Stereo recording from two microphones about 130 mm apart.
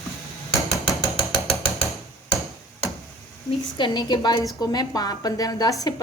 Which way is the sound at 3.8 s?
35° left (ahead or behind).